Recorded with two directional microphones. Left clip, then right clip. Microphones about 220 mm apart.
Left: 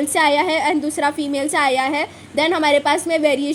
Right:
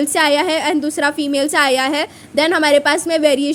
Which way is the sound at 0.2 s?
35° right (ahead or behind).